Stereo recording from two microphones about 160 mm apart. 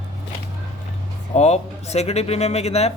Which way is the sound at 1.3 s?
45° left (ahead or behind).